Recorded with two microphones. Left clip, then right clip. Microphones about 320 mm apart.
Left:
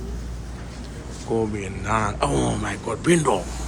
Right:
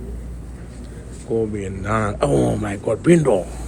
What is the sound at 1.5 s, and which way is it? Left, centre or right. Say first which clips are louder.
A man's voice: right 1 dB; centre.